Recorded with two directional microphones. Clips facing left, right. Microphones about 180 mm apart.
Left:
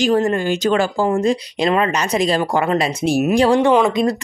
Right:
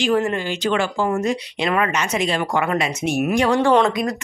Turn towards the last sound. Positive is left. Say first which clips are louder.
# left 2 dB
turn(degrees=25)  # may be behind; listen again after turning